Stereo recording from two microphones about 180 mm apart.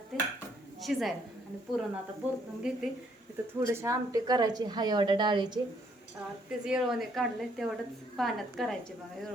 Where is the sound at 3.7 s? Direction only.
15° right (ahead or behind).